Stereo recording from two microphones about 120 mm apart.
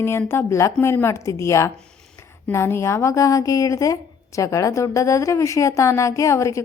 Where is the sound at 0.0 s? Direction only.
20° left (ahead or behind).